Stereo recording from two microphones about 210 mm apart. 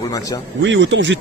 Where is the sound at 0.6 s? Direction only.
60° right (ahead or behind).